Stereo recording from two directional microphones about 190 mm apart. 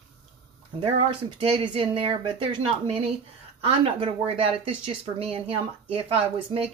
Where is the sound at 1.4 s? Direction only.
30° right (ahead or behind).